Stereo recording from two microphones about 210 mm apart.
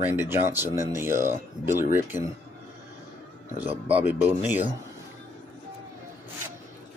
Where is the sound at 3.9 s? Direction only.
5° right (ahead or behind).